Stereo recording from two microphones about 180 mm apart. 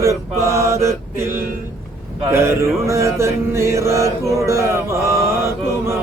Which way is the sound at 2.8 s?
15° right (ahead or behind).